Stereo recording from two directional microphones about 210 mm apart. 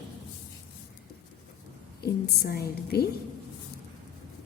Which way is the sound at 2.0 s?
50° left (ahead or behind).